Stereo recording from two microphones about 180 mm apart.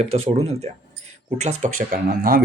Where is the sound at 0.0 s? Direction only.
35° right (ahead or behind).